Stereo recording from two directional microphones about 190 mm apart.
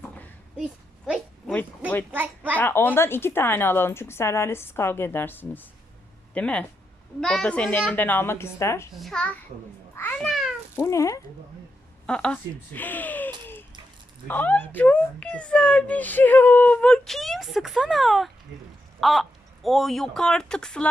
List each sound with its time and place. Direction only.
0.5 s a sound: 5° right (ahead or behind)
2.1 s a child's voice: 10° right (ahead or behind)
2.6 s a woman's voice: 10° left (ahead or behind)
9.0 s a child's voice: 5° left (ahead or behind)
9.9 s meow: 10° left (ahead or behind)
10.8 s a woman's voice: 15° left (ahead or behind)
12.0 s a woman's voice: 5° left (ahead or behind)
13.4 s a sound: 10° left (ahead or behind)
14.3 s a child's voice: 10° left (ahead or behind)